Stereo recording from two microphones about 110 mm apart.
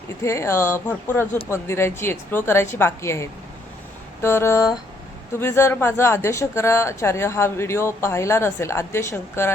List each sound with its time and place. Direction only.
0.2 s speech: 25° left (ahead or behind)